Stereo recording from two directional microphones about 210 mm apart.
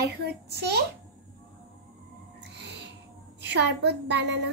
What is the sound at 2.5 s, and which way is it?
Music, 55° right (ahead or behind).